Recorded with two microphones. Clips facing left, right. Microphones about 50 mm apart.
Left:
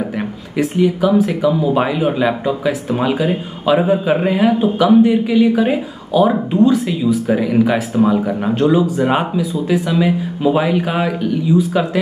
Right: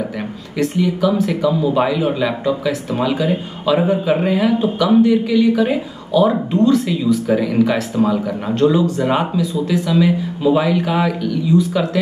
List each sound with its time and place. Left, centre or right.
0.2 s speech: centre